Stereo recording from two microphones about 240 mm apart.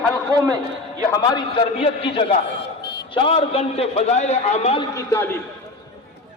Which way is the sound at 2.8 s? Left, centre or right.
Left.